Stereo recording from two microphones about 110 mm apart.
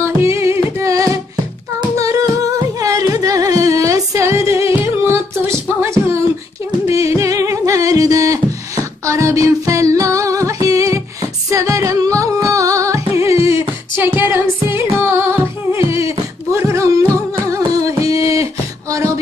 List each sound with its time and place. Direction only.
0.0 s music: 25° right (ahead or behind)
2.0 s humming: 30° right (ahead or behind)
2.8 s music: 30° right (ahead or behind)
16.5 s a sound: 25° right (ahead or behind)
17.5 s music: 30° right (ahead or behind)
18.3 s a sound: 30° right (ahead or behind)